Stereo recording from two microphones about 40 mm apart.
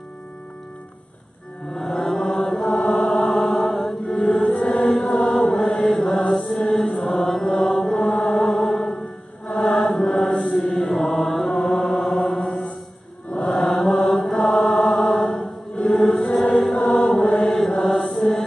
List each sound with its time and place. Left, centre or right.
1.7 s mantra: centre
4.1 s choir: centre
4.6 s chant: centre
6.3 s mantra: centre; by 7.8 s left
8.0 s chant: left
8.5 s music: centre
9.5 s chant: left
9.8 s chant: centre
10.8 s mantra: centre
11.1 s music: centre
13.6 s mantra: centre
14.3 s chant: centre
16.0 s choir: centre
17.4 s mantra: centre